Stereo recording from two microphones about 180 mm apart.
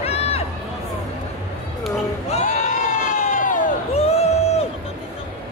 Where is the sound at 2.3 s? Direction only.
45° left (ahead or behind).